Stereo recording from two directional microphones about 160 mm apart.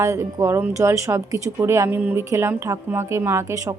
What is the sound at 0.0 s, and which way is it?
Speech, 20° right (ahead or behind).